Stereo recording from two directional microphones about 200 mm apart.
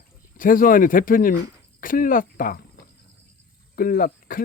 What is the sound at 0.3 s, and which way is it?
Speech, 45° left (ahead or behind).